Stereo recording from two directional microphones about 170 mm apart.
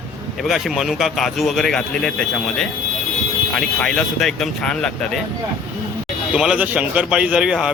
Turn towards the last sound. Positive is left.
turn(degrees=-5)  # may be behind; listen again after turning